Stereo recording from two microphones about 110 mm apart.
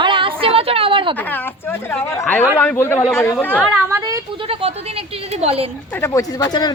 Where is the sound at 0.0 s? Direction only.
50° right (ahead or behind).